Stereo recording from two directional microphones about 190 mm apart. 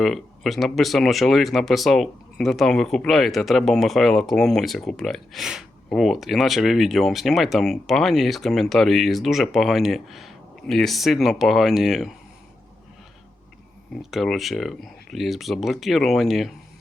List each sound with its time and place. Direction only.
0.0 s speech: centre (ahead or behind)
14.0 s speech: centre (ahead or behind)